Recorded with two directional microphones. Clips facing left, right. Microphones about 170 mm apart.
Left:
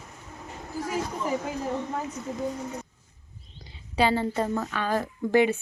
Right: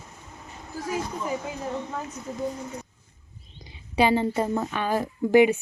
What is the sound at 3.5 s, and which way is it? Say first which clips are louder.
A woman's voice: right 2 dB; 15° right (ahead or behind).